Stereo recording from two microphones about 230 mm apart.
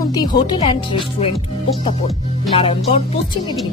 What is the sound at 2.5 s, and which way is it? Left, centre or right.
Speech, left.